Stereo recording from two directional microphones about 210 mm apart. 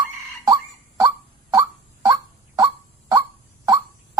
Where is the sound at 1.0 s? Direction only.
20° right (ahead or behind).